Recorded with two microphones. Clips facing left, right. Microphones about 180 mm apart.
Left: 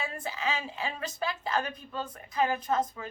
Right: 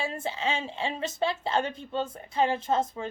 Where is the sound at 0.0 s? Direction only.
25° right (ahead or behind).